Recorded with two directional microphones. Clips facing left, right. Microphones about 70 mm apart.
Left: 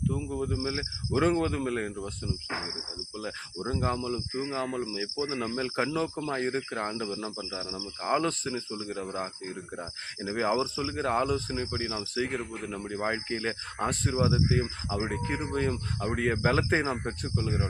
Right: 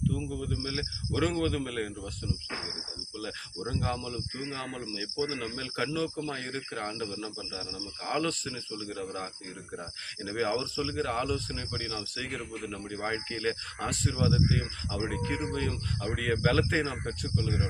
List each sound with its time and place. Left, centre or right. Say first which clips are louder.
0.1 s speech: left 3 dB; left
12.8 s speech: left 4 dB; centre; by 17.6 s left